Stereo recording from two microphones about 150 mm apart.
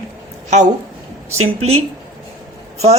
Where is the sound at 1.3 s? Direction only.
45° right (ahead or behind).